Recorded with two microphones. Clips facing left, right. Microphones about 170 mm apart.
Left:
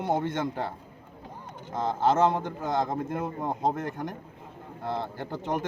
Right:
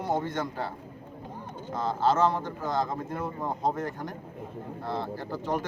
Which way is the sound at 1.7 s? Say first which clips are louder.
Left 1 dB; 20° left (ahead or behind).